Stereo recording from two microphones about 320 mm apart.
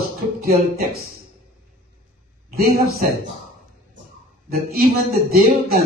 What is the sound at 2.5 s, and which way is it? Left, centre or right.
Speech, right.